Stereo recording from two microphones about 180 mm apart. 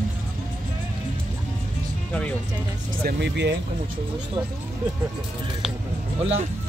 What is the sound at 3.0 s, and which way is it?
Speech, 70° right (ahead or behind).